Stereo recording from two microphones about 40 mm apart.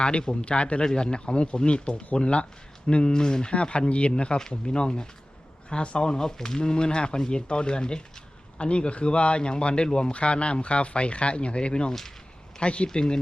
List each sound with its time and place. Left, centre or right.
0.0 s speech: left